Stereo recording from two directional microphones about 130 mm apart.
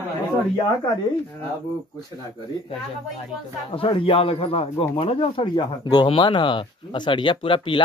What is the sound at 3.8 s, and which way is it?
A man's voice, 45° left (ahead or behind).